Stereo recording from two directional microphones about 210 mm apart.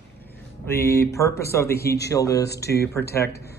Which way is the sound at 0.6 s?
10° left (ahead or behind).